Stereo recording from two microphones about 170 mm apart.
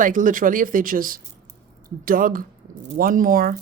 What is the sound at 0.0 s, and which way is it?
Speech, 50° right (ahead or behind).